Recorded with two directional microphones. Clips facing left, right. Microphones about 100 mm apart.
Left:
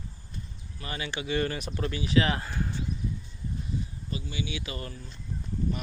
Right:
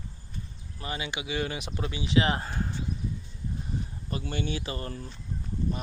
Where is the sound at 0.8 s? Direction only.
20° right (ahead or behind).